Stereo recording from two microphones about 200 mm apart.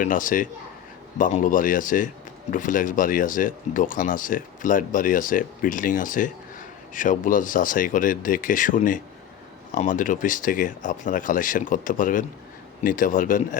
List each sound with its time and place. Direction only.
0.0 s speech: 40° left (ahead or behind)